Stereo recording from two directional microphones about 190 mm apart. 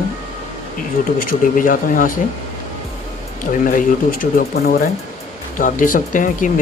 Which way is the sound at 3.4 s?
45° left (ahead or behind).